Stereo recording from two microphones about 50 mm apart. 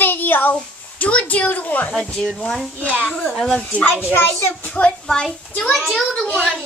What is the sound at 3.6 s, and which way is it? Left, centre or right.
A child's voice, left.